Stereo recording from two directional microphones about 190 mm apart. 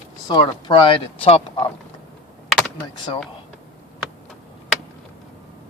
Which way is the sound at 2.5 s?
10° left (ahead or behind).